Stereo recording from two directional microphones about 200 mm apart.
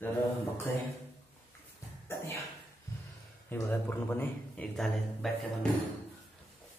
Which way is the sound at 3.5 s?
10° left (ahead or behind).